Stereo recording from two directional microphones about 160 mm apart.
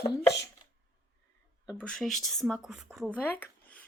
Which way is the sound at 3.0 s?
10° left (ahead or behind).